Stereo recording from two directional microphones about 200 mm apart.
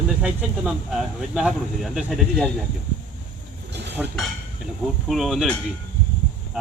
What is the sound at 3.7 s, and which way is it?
Chink, 60° right (ahead or behind).